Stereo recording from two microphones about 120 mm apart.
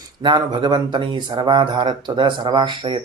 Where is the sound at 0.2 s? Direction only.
40° right (ahead or behind).